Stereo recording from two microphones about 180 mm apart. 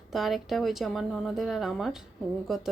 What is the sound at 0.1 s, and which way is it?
Speech, centre (ahead or behind).